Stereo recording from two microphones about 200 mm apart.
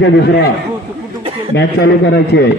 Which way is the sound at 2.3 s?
60° left (ahead or behind).